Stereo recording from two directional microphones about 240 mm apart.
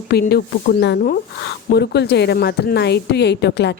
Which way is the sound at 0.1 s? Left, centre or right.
Left.